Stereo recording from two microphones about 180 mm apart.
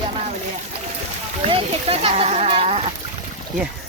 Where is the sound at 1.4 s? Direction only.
35° right (ahead or behind).